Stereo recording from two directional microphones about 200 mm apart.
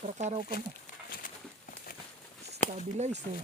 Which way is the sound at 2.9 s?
35° right (ahead or behind).